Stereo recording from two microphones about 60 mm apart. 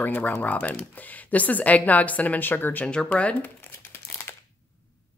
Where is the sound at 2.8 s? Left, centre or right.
Centre.